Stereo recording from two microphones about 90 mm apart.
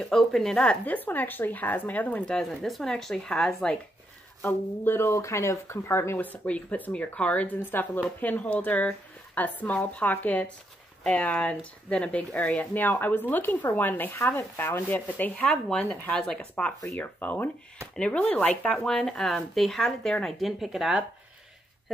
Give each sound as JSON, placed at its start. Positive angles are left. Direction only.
{"t": 0.0, "sound": "speech", "side_deg": 5}
{"t": 4.4, "sound": "speech", "side_deg": 30}